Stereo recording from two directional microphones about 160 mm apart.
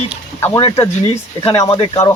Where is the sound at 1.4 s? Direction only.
20° left (ahead or behind).